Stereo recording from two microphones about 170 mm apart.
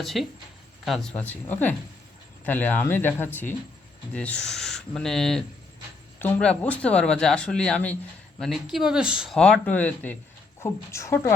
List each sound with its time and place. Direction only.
0.0 s speech: centre (ahead or behind); by 11.3 s 15° left (ahead or behind)